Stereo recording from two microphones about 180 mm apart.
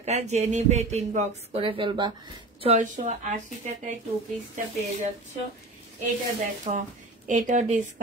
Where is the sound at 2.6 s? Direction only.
40° right (ahead or behind).